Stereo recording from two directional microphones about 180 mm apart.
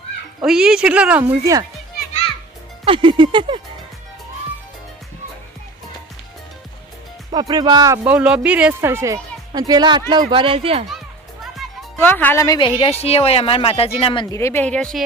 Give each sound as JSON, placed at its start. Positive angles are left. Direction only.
{"t": 0.4, "sound": "speech", "side_deg": -5}
{"t": 2.8, "sound": "speech", "side_deg": -30}
{"t": 7.3, "sound": "speech", "side_deg": -25}
{"t": 8.0, "sound": "speech", "side_deg": -5}
{"t": 11.5, "sound": "music", "side_deg": 0}
{"t": 11.9, "sound": "speech", "side_deg": 10}
{"t": 12.5, "sound": "speech", "side_deg": 30}
{"t": 14.3, "sound": "speech", "side_deg": 15}